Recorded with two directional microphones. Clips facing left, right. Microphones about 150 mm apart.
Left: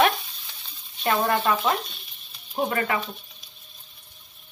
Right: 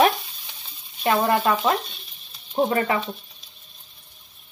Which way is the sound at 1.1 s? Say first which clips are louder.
Right 2 dB; 15° right (ahead or behind).